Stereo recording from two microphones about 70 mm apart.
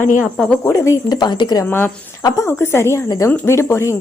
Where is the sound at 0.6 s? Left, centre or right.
Left.